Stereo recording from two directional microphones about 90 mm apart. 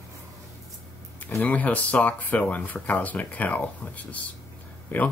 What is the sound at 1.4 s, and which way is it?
Speech, 15° left (ahead or behind).